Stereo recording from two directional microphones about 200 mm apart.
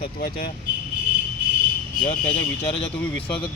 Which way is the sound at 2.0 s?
30° left (ahead or behind).